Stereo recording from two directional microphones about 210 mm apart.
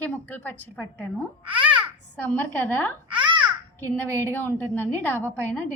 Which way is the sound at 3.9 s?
10° left (ahead or behind).